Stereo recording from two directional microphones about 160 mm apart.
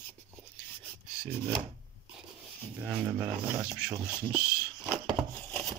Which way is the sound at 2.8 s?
5° right (ahead or behind).